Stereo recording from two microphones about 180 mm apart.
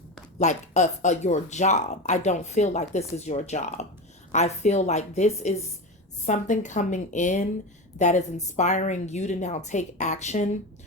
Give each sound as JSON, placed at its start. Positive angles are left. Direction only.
{"t": 0.3, "sound": "a woman's voice", "side_deg": 40}